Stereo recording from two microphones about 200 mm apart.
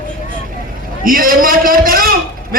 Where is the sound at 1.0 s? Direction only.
45° right (ahead or behind).